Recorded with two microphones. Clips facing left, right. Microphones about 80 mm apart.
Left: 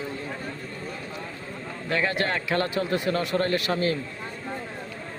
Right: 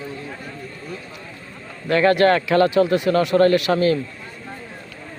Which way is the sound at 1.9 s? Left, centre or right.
Right.